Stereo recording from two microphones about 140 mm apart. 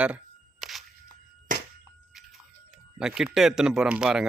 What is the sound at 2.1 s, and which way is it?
Chewing, 5° right (ahead or behind).